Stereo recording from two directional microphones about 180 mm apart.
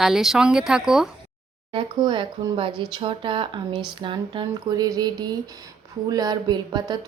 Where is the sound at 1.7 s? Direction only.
25° right (ahead or behind).